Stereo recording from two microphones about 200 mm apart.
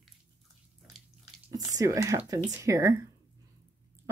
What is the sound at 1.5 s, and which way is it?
Speech, 15° right (ahead or behind).